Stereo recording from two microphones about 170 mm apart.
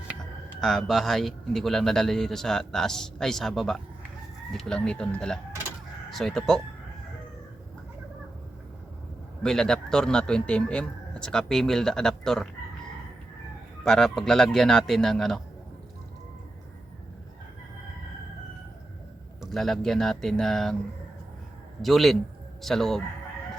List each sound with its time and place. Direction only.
0.6 s a man's voice: centre (ahead or behind)
9.4 s a man's voice: 5° left (ahead or behind)
13.8 s a man's voice: 5° left (ahead or behind)
19.4 s a man's voice: centre (ahead or behind)
21.8 s a man's voice: centre (ahead or behind)